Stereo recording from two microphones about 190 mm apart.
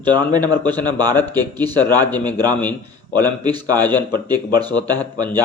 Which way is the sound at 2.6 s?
10° left (ahead or behind).